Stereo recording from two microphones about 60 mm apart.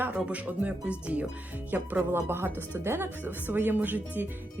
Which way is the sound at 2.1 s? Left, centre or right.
Right.